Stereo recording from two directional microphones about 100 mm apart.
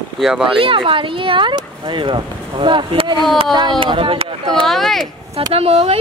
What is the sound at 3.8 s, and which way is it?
Speech, 60° right (ahead or behind).